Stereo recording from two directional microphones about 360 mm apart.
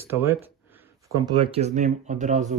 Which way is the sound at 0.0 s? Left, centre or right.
Centre.